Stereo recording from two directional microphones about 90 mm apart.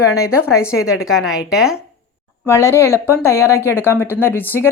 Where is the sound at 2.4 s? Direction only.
30° left (ahead or behind).